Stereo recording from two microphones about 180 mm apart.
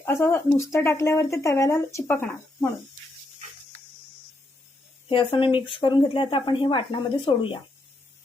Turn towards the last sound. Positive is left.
turn(degrees=30)  # may be behind; listen again after turning